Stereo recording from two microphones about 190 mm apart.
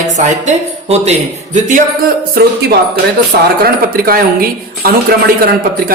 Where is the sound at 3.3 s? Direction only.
55° right (ahead or behind).